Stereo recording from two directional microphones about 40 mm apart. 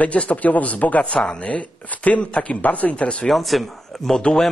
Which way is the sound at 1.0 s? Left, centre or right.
Left.